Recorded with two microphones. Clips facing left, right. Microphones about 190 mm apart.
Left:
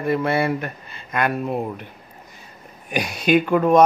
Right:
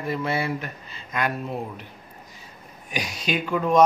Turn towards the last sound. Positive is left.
turn(degrees=55)  # may be behind; listen again after turning